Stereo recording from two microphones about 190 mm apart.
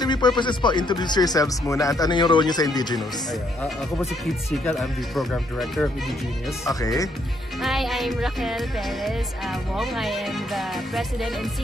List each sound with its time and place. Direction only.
0.0 s music: 25° left (ahead or behind)
0.4 s speech: 25° left (ahead or behind)
4.5 s music: centre (ahead or behind)
6.6 s speech: 20° left (ahead or behind)
7.6 s music: centre (ahead or behind)